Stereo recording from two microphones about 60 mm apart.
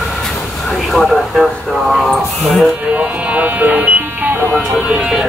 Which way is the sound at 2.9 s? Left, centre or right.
Right.